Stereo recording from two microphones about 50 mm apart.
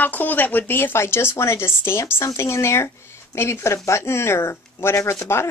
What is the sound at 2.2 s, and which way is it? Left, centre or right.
Speech, left.